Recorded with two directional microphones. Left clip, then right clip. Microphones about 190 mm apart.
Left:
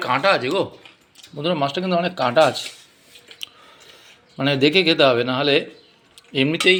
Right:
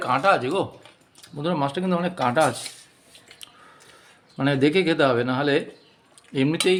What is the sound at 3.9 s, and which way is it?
Speech, 15° right (ahead or behind).